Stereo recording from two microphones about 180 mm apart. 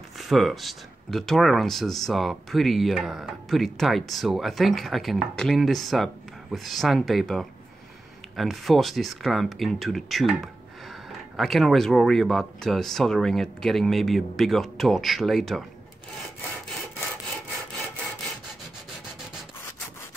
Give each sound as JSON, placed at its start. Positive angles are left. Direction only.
{"t": 0.2, "sound": "speech", "side_deg": 0}